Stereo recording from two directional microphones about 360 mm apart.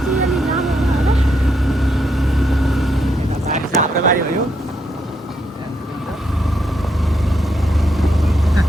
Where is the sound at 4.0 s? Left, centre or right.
Right.